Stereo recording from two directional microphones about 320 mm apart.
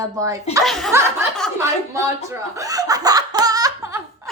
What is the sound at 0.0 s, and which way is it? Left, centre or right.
Speech, centre.